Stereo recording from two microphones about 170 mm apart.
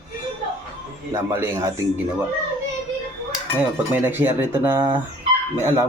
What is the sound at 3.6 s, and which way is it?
Speech, 10° right (ahead or behind).